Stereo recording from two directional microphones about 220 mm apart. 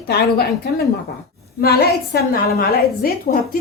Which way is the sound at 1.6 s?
45° left (ahead or behind).